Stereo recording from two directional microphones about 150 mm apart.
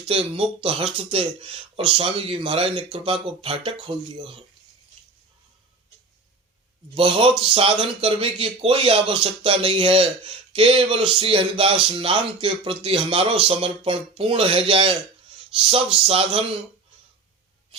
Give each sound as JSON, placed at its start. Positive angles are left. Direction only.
{"t": 0.1, "sound": "speech", "side_deg": -40}
{"t": 6.9, "sound": "speech", "side_deg": -35}